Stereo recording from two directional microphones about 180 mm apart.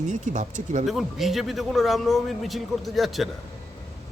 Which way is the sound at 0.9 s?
Centre (ahead or behind).